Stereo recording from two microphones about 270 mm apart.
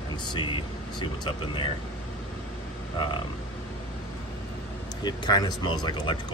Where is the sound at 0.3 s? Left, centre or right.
Centre.